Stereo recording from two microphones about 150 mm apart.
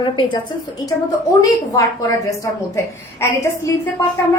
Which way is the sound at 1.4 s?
20° left (ahead or behind).